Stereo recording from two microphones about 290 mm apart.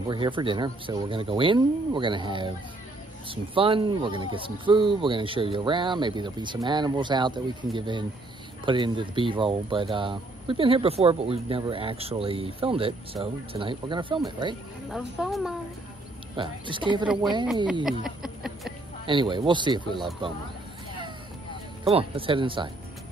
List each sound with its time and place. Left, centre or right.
0.1 s speech: centre
14.9 s speech: centre
16.3 s speech: centre
17.8 s a sound: centre
19.0 s speech: centre
21.8 s speech: centre